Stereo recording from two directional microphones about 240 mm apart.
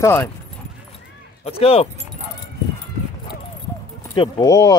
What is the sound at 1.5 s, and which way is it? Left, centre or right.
Speech, left.